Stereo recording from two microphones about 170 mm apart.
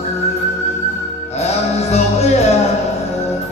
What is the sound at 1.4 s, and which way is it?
Music, 40° left (ahead or behind).